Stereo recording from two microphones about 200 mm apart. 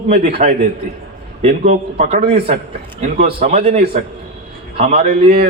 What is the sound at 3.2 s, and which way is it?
A man's voice, 30° right (ahead or behind).